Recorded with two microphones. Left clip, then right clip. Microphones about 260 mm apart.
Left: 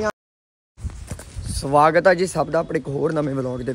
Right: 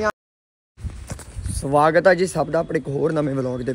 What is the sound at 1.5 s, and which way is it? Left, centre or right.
Speech, centre.